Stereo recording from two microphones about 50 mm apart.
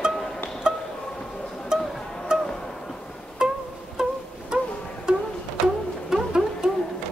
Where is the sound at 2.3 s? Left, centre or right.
Centre.